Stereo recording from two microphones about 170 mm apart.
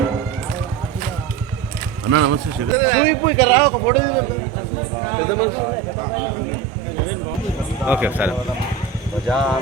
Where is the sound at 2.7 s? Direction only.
55° left (ahead or behind).